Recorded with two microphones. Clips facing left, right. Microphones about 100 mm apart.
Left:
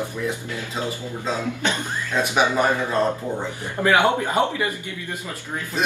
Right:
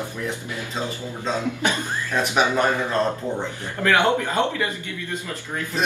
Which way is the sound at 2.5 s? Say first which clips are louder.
Even; 10° left (ahead or behind).